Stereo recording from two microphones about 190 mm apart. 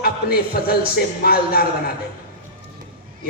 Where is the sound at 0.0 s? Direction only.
55° left (ahead or behind).